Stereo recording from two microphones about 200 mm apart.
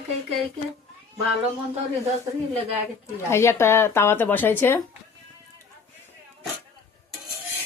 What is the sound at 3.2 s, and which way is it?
Speech, 15° left (ahead or behind).